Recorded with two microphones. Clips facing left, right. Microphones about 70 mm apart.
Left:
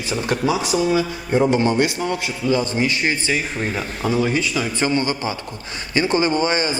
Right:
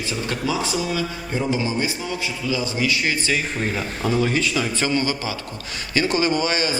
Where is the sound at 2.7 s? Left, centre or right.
Left.